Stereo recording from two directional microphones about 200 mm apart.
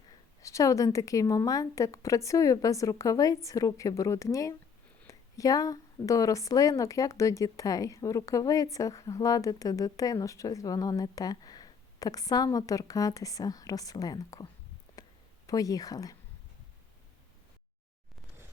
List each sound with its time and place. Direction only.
0.4 s a woman's voice: 15° left (ahead or behind)
15.4 s a woman's voice: 15° left (ahead or behind)